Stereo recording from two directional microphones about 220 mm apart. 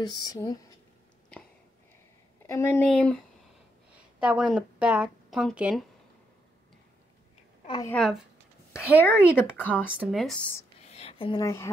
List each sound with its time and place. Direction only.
0.0 s speech: 20° left (ahead or behind)
2.4 s a woman's voice: 10° left (ahead or behind); by 5.9 s 5° right (ahead or behind)
7.6 s a woman's voice: 20° left (ahead or behind)
7.9 s a woman's voice: 5° left (ahead or behind)
10.8 s a sound: 30° left (ahead or behind)
11.4 s speech: 10° left (ahead or behind)